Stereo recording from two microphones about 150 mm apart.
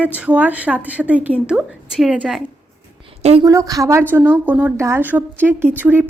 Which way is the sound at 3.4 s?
20° right (ahead or behind).